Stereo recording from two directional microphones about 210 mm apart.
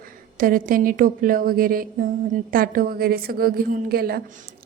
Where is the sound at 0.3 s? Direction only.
40° right (ahead or behind).